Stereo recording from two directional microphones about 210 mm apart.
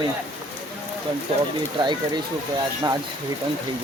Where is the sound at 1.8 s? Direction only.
20° right (ahead or behind).